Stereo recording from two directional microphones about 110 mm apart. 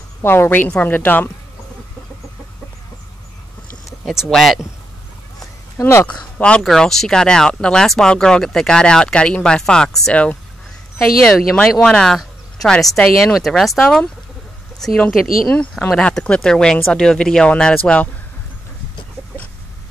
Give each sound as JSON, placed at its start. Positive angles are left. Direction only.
{"t": 0.2, "sound": "speech", "side_deg": 20}
{"t": 4.3, "sound": "speech", "side_deg": 0}
{"t": 5.8, "sound": "speech", "side_deg": 25}
{"t": 6.0, "sound": "speech", "side_deg": 10}
{"t": 11.7, "sound": "speech", "side_deg": 5}